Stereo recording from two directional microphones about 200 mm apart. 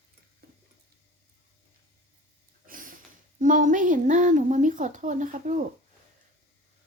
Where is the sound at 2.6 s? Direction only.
45° right (ahead or behind).